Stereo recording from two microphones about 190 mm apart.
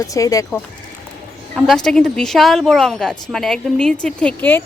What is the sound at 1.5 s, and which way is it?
Speech, centre (ahead or behind).